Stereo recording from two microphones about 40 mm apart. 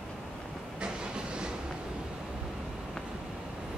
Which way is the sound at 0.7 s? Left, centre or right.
Right.